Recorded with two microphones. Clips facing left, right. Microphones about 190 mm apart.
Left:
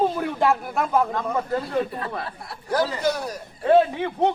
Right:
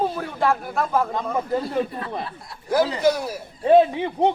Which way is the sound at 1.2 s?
15° right (ahead or behind).